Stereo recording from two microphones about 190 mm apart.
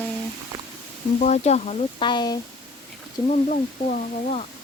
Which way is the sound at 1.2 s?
35° left (ahead or behind).